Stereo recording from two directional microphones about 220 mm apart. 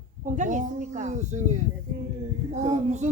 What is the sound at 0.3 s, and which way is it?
A woman's voice, 35° right (ahead or behind).